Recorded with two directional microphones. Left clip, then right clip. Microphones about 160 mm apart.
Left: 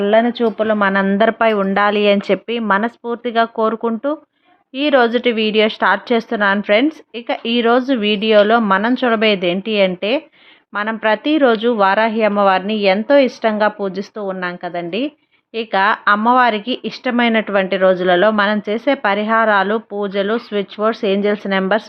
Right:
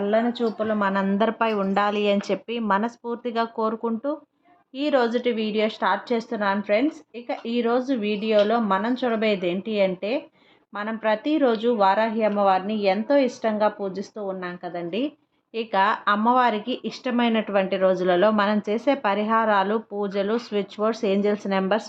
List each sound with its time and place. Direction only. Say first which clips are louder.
0.0 s speech: left 9 dB; 35° left (ahead or behind); by 21.8 s 15° left (ahead or behind)